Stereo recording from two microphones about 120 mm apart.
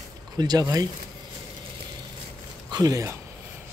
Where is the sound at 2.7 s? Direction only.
30° right (ahead or behind).